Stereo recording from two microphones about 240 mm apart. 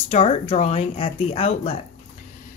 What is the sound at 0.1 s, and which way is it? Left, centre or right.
Speech, left.